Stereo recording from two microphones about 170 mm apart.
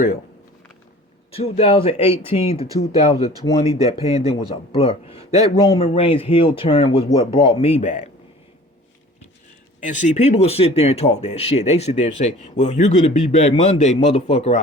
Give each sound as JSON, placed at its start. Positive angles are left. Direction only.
{"t": 1.3, "sound": "speech", "side_deg": 35}
{"t": 9.8, "sound": "speech", "side_deg": 45}